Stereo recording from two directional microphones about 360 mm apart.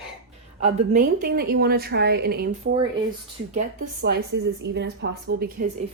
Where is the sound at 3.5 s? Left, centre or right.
Right.